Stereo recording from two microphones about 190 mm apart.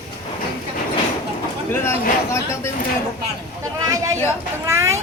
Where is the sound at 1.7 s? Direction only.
15° left (ahead or behind).